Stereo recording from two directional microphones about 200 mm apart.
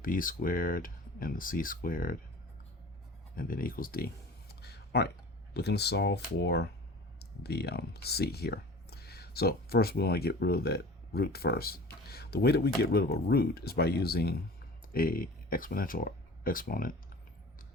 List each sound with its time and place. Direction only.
0.0 s speech: 45° left (ahead or behind)
3.3 s a sound: 45° left (ahead or behind)
5.5 s speech: 55° left (ahead or behind)